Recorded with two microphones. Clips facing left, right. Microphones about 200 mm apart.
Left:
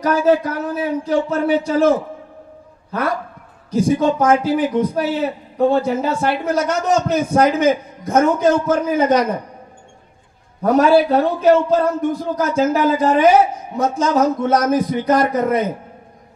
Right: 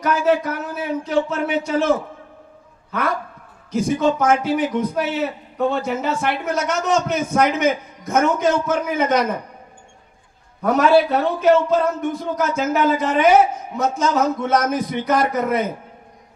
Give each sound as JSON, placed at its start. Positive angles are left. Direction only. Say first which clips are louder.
{"t": 0.0, "sound": "a man's voice", "louder": "left 3 dB", "side_deg": 30}
{"t": 3.7, "sound": "a man's voice", "louder": "left 3 dB", "side_deg": 30}
{"t": 10.6, "sound": "a man's voice", "louder": "left 2 dB", "side_deg": 30}